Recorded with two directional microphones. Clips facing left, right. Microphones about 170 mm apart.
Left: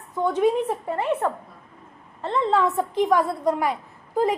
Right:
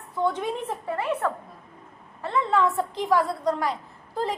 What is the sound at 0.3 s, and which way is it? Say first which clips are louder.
A woman's voice: left 9 dB; 20° left (ahead or behind).